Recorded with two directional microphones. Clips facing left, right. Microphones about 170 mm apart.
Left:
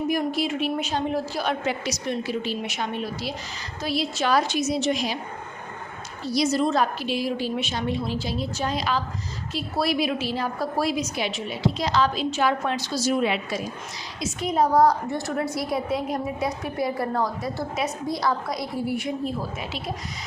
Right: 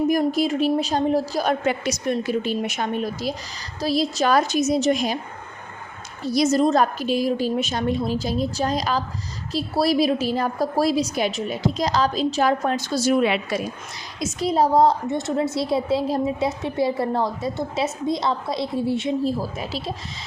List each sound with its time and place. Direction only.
0.1 s a woman's voice: 40° right (ahead or behind)
6.2 s a woman's voice: 50° right (ahead or behind); by 13.6 s 70° right (ahead or behind)
14.2 s a woman's voice: 35° right (ahead or behind)
19.4 s a woman's voice: 35° right (ahead or behind)